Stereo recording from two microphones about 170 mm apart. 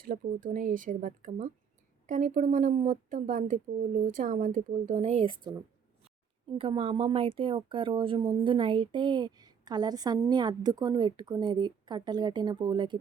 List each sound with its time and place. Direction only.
0.0 s speech: 55° right (ahead or behind); by 13.0 s 25° right (ahead or behind)